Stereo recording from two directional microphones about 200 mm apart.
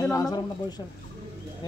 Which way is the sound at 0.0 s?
20° left (ahead or behind).